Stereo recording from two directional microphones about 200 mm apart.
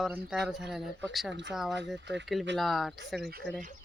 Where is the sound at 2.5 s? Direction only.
Centre (ahead or behind).